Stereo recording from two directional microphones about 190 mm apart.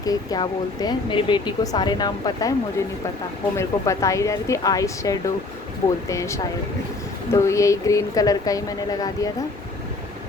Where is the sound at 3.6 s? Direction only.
15° left (ahead or behind).